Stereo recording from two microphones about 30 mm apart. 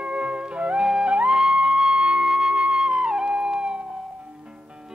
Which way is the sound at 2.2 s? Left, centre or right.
Centre.